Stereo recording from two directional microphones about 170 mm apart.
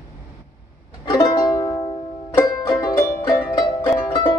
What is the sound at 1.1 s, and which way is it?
Music, 20° left (ahead or behind).